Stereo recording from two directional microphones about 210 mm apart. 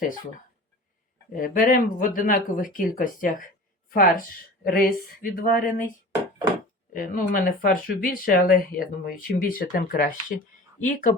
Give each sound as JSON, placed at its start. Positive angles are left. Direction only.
{"t": 1.3, "sound": "speech", "side_deg": 40}
{"t": 6.9, "sound": "speech", "side_deg": 40}